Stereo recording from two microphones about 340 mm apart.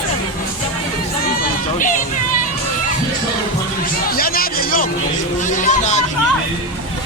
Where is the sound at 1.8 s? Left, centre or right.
Left.